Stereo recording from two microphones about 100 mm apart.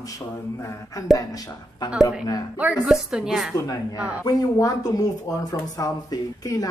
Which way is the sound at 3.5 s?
40° left (ahead or behind).